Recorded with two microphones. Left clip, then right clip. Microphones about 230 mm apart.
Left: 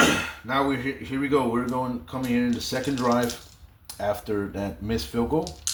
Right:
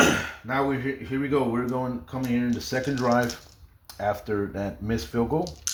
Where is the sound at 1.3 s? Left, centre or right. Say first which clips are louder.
Left 2 dB; right.